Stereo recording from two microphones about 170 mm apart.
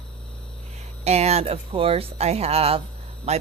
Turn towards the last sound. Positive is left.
turn(degrees=-40)  # may be behind; listen again after turning